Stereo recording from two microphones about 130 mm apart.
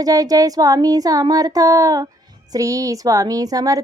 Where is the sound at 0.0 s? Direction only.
30° right (ahead or behind).